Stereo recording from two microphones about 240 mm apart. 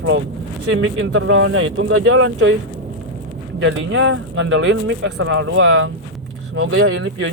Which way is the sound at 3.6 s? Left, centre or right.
Right.